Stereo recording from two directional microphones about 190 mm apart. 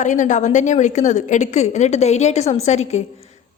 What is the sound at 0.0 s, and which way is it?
A woman's voice, 40° left (ahead or behind).